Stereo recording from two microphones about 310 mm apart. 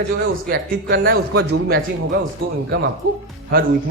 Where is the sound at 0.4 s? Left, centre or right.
Right.